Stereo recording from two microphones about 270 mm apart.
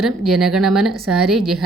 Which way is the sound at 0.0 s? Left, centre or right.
Centre.